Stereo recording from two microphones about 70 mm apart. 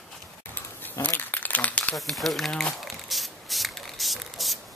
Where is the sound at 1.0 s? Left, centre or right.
Left.